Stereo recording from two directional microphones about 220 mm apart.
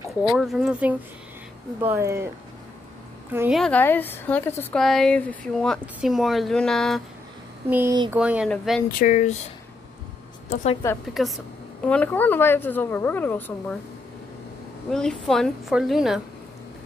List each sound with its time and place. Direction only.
0.3 s a woman's voice: centre (ahead or behind)
3.3 s a woman's voice: centre (ahead or behind)
7.7 s a woman's voice: 10° right (ahead or behind)
9.0 s speech: 35° left (ahead or behind)
10.5 s a woman's voice: 30° left (ahead or behind)
11.2 s a woman's voice: centre (ahead or behind)
14.9 s a woman's voice: centre (ahead or behind)